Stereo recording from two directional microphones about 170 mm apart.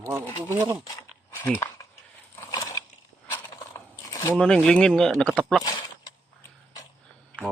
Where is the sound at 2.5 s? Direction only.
20° left (ahead or behind).